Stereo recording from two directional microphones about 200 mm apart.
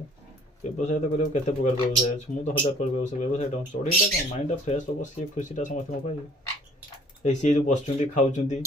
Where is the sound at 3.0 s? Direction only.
35° left (ahead or behind).